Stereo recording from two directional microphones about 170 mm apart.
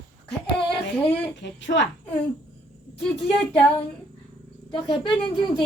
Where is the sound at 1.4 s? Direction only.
90° left.